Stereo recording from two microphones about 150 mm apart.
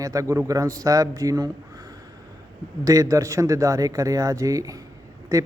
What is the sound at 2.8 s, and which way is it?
Speech, 25° right (ahead or behind).